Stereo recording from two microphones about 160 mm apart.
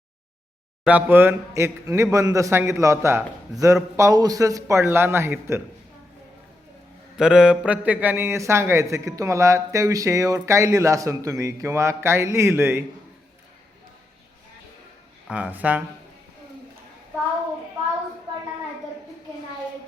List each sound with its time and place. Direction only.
0.9 s a man's voice: 10° right (ahead or behind)
7.2 s a man's voice: 5° right (ahead or behind)
15.3 s a man's voice: 10° right (ahead or behind)